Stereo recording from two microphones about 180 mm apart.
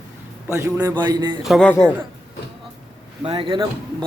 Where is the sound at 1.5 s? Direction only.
Centre (ahead or behind).